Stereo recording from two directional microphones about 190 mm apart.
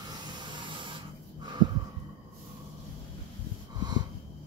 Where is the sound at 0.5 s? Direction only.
25° right (ahead or behind).